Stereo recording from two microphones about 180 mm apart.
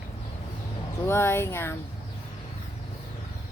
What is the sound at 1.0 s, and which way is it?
Speech, 15° left (ahead or behind).